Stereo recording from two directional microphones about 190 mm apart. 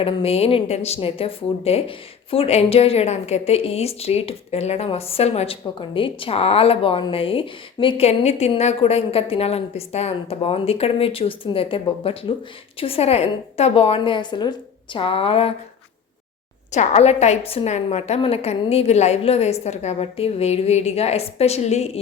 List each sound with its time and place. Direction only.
0.0 s a woman's voice: 30° left (ahead or behind)
16.7 s speech: 35° left (ahead or behind)